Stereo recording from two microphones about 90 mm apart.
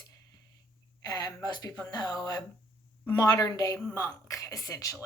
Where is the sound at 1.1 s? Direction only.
50° left (ahead or behind).